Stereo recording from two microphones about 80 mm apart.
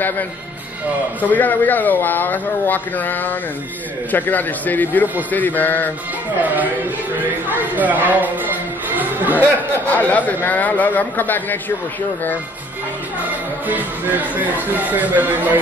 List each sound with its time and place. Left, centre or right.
1.2 s speech: left
6.4 s speech: right
8.9 s chatter: right
9.8 s speech: centre
13.7 s speech: right